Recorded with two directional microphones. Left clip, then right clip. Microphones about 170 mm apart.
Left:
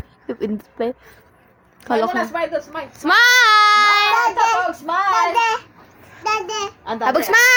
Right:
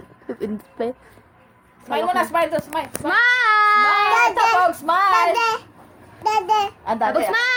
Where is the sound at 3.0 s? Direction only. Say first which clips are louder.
Left 5 dB; 50° left (ahead or behind); by 4.0 s 35° left (ahead or behind).